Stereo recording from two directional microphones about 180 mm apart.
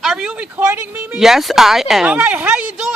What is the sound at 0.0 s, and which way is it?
Speech, centre (ahead or behind).